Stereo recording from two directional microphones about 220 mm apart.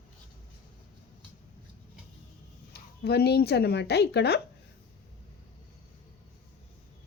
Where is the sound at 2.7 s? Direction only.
45° left (ahead or behind).